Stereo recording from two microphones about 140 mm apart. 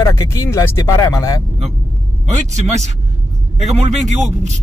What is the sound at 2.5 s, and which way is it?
A man's voice, 55° right (ahead or behind).